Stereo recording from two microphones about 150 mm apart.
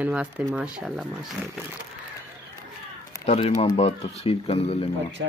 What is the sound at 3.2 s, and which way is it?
Speech, 45° left (ahead or behind).